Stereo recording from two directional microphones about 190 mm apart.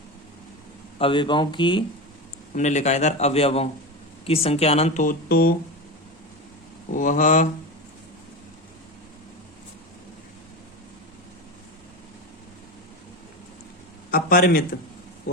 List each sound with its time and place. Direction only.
0.9 s speech: 25° left (ahead or behind)
2.6 s speech: 35° left (ahead or behind)
6.9 s a man's voice: 45° left (ahead or behind)
14.1 s a man's voice: 50° left (ahead or behind)